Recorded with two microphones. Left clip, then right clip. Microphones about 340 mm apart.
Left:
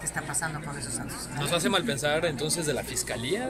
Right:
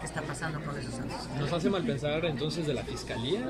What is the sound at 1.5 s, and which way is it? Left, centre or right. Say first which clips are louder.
Speech: left 5 dB; left.